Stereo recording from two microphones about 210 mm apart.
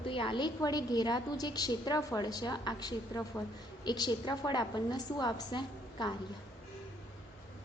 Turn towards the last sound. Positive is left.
turn(degrees=20)  # may be behind; listen again after turning